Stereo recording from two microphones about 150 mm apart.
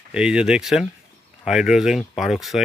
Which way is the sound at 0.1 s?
5° right (ahead or behind).